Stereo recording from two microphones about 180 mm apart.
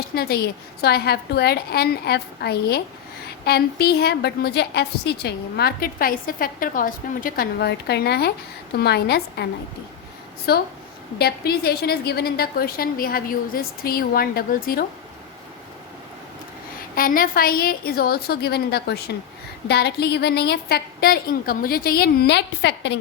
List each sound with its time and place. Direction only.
0.1 s a woman's voice: 60° left (ahead or behind)
10.5 s a woman's voice: 60° left (ahead or behind)
16.9 s a woman's voice: 55° left (ahead or behind); by 23.0 s 70° left (ahead or behind)